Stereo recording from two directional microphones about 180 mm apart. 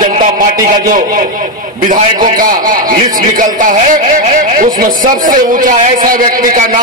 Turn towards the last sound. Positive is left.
turn(degrees=-50)  # may be behind; listen again after turning